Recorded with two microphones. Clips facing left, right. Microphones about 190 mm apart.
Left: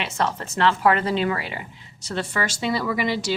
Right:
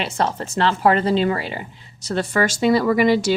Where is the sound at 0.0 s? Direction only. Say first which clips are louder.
Right 3 dB; 35° right (ahead or behind).